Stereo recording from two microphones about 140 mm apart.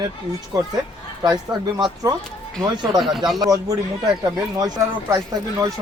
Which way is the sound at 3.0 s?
Centre (ahead or behind).